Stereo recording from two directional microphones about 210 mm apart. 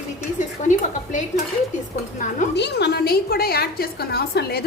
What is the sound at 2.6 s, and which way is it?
A woman's voice, 55° left (ahead or behind).